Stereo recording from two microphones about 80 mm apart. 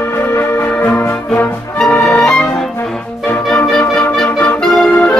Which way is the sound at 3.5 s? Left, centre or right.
Centre.